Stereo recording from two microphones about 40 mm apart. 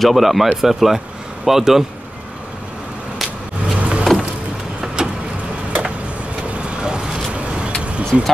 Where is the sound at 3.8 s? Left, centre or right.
Right.